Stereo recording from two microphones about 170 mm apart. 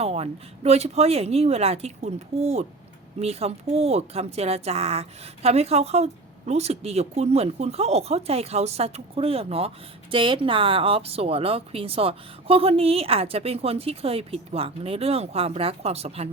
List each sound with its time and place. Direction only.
0.0 s speech: 40° right (ahead or behind)